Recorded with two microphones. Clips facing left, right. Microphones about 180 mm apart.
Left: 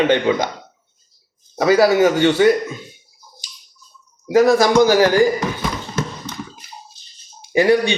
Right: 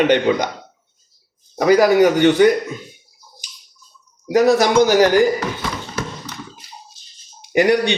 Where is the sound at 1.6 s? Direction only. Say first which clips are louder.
Right 1 dB; 15° right (ahead or behind).